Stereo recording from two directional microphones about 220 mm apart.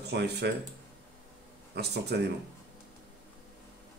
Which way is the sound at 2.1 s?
50° right (ahead or behind).